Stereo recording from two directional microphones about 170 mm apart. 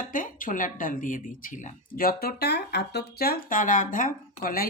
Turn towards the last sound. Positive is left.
turn(degrees=60)  # may be behind; listen again after turning